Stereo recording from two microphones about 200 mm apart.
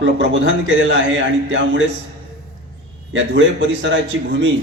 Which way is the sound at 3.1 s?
70° right (ahead or behind).